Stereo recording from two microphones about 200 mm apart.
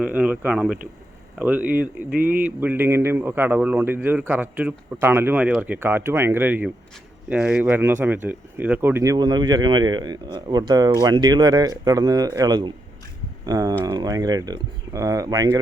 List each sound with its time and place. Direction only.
0.0 s speech: 5° right (ahead or behind)